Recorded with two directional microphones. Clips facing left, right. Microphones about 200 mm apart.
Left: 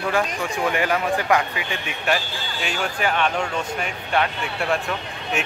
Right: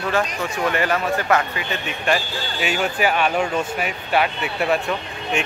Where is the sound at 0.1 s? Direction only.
15° left (ahead or behind).